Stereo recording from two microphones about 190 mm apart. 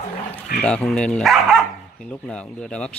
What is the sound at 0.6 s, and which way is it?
Speech, 5° left (ahead or behind).